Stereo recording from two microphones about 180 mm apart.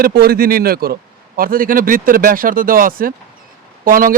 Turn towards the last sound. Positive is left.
turn(degrees=-50)  # may be behind; listen again after turning